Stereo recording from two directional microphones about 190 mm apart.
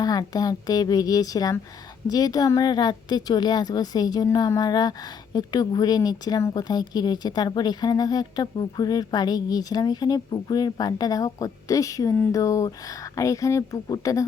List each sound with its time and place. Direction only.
0.0 s a woman's voice: 20° left (ahead or behind)